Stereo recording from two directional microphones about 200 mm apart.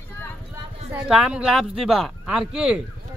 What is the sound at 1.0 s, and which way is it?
Speech, 5° right (ahead or behind).